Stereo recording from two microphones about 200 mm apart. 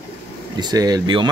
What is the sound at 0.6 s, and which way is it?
Speech, 20° right (ahead or behind).